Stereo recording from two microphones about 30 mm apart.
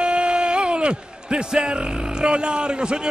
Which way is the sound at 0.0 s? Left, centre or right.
Right.